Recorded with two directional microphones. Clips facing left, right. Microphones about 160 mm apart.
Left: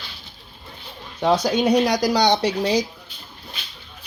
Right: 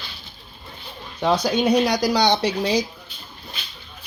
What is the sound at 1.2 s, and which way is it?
Speech, 45° left (ahead or behind).